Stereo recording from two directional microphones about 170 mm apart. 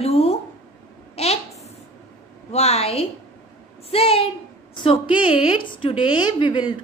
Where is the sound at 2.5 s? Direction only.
40° left (ahead or behind).